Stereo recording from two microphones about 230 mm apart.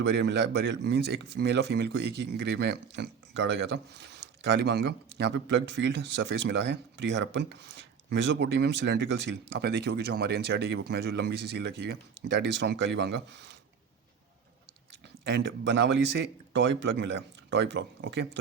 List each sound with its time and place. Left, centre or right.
0.0 s speech: right
15.2 s speech: right